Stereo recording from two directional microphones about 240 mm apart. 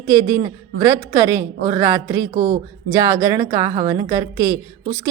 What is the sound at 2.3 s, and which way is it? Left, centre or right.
Speech, right.